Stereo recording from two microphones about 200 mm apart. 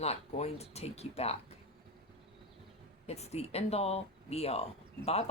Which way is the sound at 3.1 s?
30° left (ahead or behind).